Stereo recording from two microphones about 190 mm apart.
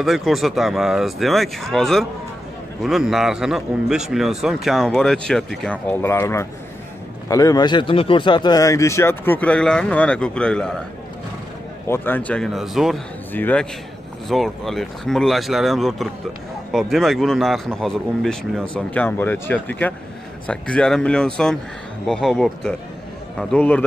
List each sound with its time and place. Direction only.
0.0 s a man's voice: centre (ahead or behind)
11.9 s a man's voice: 10° left (ahead or behind)